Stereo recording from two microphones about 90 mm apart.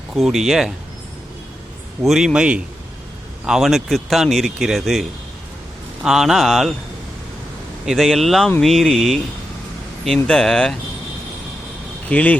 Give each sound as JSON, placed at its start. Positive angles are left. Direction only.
{"t": 0.2, "sound": "speech", "side_deg": 0}
{"t": 2.0, "sound": "a man's voice", "side_deg": -5}
{"t": 6.1, "sound": "speech", "side_deg": -5}
{"t": 7.9, "sound": "speech", "side_deg": 0}
{"t": 10.2, "sound": "speech", "side_deg": 5}
{"t": 12.0, "sound": "speech", "side_deg": 15}